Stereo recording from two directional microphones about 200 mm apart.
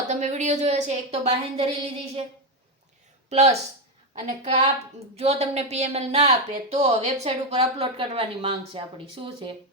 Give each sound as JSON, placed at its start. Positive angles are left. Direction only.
{"t": 0.1, "sound": "speech", "side_deg": -35}
{"t": 3.2, "sound": "speech", "side_deg": -35}